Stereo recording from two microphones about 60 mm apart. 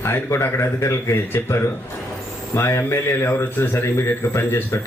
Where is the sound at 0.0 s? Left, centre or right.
Left.